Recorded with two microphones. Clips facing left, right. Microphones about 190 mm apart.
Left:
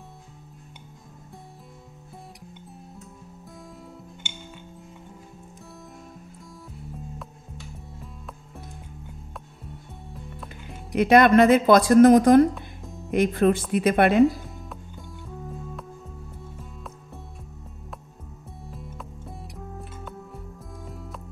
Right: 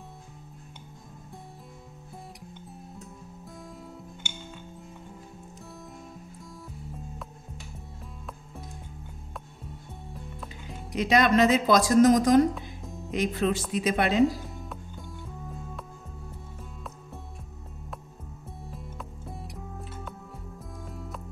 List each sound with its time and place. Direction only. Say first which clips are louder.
10.1 s music: left 2 dB; centre (ahead or behind)
11.0 s speech: left 6 dB; 55° left (ahead or behind)
12.5 s music: even; centre (ahead or behind)
13.1 s speech: left 6 dB; 55° left (ahead or behind)
14.6 s music: even; centre (ahead or behind)
18.7 s music: left 2 dB; centre (ahead or behind)
20.8 s music: even; centre (ahead or behind)